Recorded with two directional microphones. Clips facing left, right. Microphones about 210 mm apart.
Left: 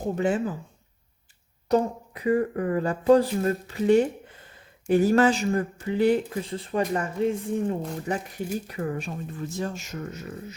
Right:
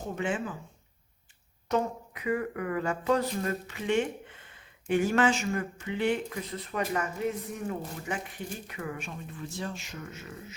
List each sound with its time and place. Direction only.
0.0 s speech: 40° left (ahead or behind)
1.6 s speech: 35° left (ahead or behind)